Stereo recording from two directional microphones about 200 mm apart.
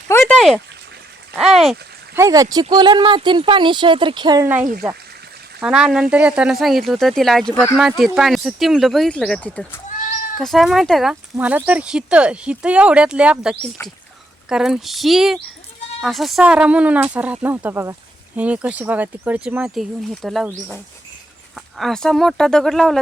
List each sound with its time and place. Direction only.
0.1 s a sound: 10° left (ahead or behind)
0.3 s a sound: centre (ahead or behind)
2.1 s speech: 15° right (ahead or behind)
5.5 s speech: 5° right (ahead or behind)
20.5 s speech: 15° right (ahead or behind)
21.5 s speech: centre (ahead or behind)